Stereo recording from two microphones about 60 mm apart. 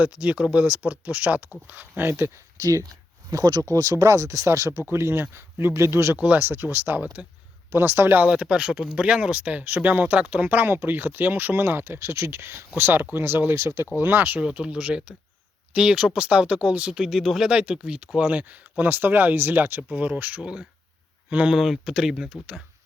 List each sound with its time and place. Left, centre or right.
0.0 s speech: right
2.6 s speech: right
4.8 s speech: right
6.1 s speech: right
8.3 s speech: centre; by 14.4 s right
14.4 s speech: centre
17.0 s speech: centre
17.5 s speech: centre; by 19.8 s right
19.9 s speech: right
20.4 s speech: centre
21.6 s speech: centre